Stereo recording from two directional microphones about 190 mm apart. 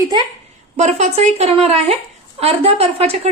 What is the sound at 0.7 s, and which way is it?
A woman's voice, 40° right (ahead or behind).